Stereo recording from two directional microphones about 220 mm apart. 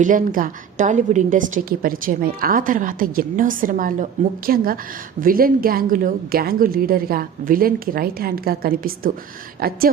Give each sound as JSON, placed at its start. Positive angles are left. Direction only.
{"t": 0.0, "sound": "a woman's voice", "side_deg": -35}